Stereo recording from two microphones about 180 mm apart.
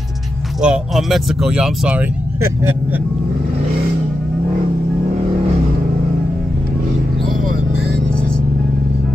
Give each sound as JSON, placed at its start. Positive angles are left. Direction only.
{"t": 0.6, "sound": "speech", "side_deg": -5}